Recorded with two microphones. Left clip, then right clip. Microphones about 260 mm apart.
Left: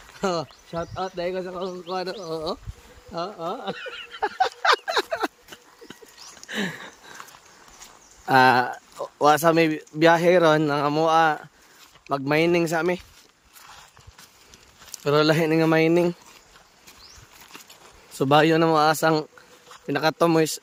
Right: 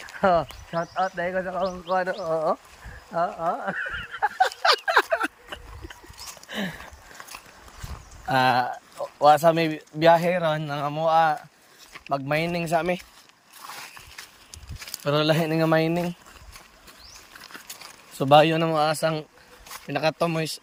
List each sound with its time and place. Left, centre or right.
0.2 s speech: centre
3.1 s a sound: centre
6.5 s a sound: centre
8.3 s speech: centre
15.0 s speech: centre
18.2 s speech: centre